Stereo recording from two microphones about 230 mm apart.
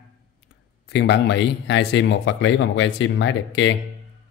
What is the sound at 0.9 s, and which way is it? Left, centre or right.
Speech, left.